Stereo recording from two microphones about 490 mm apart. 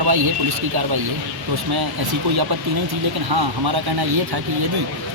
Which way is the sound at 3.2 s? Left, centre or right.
Right.